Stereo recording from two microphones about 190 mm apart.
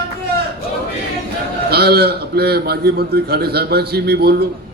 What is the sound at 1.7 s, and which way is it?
A man's voice, 55° right (ahead or behind).